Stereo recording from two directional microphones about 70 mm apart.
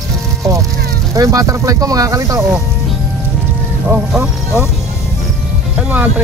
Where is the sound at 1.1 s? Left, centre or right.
Right.